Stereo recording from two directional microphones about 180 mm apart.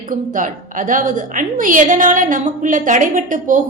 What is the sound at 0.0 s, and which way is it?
A woman's voice, 45° right (ahead or behind).